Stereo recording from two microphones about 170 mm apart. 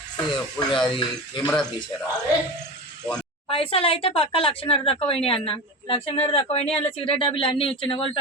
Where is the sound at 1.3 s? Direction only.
5° left (ahead or behind).